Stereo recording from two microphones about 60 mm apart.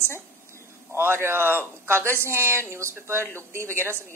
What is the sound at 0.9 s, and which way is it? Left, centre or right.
A man's voice, right.